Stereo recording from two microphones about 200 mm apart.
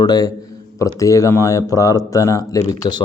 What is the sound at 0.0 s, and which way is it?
A man's voice, 20° left (ahead or behind).